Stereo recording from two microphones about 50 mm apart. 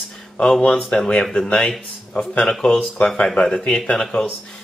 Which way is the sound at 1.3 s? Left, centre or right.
Centre.